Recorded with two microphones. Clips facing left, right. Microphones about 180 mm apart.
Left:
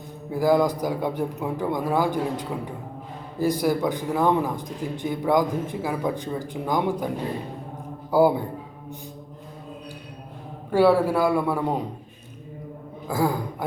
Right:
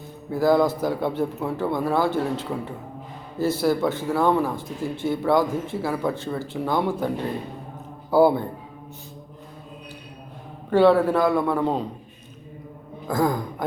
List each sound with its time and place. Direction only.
0.3 s a man's voice: 10° left (ahead or behind)
8.1 s a man's voice: 10° left (ahead or behind)
10.7 s a man's voice: 10° left (ahead or behind)
13.1 s speech: 10° left (ahead or behind)